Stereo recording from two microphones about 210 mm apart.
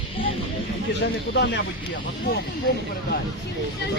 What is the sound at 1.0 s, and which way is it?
Speech, 55° left (ahead or behind).